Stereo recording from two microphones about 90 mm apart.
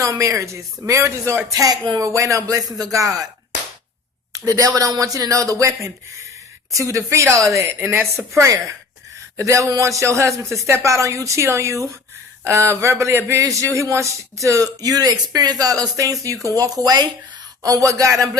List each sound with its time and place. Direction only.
0.0 s a man's voice: 35° right (ahead or behind)
4.3 s a man's voice: 40° right (ahead or behind)
9.4 s a man's voice: 35° right (ahead or behind)